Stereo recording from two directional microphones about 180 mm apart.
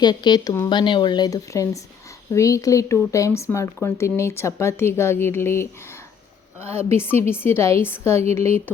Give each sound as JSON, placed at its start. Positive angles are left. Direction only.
{"t": 0.0, "sound": "speech", "side_deg": 25}